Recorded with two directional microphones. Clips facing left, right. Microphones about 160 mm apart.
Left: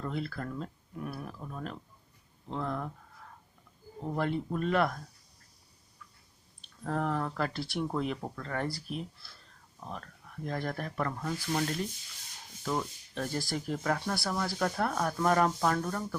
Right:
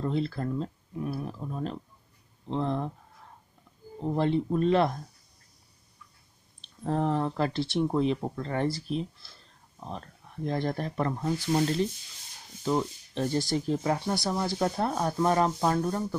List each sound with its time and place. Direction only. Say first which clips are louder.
0.0 s speech: right 6 dB; 25° right (ahead or behind)
4.0 s speech: right 6 dB; 25° right (ahead or behind)
6.8 s speech: right 5 dB; 25° right (ahead or behind)